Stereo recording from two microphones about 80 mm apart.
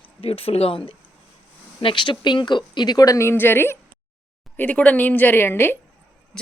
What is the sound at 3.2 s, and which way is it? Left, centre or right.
A woman's voice, left.